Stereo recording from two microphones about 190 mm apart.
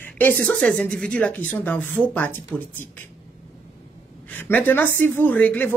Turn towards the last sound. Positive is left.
turn(degrees=10)  # may be behind; listen again after turning